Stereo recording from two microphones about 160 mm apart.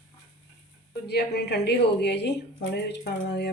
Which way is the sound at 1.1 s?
90° left.